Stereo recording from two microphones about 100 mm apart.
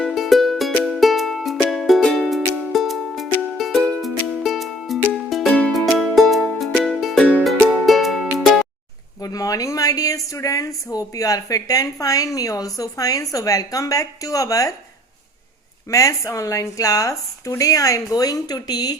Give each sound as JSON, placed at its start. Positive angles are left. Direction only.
{"t": 0.0, "sound": "music", "side_deg": 0}
{"t": 9.2, "sound": "a woman's voice", "side_deg": 35}
{"t": 15.9, "sound": "a woman's voice", "side_deg": 35}